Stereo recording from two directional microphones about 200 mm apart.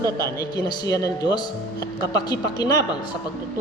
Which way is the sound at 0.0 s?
15° left (ahead or behind).